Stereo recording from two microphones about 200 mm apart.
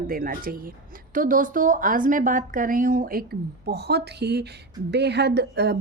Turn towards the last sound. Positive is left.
turn(degrees=-55)  # may be behind; listen again after turning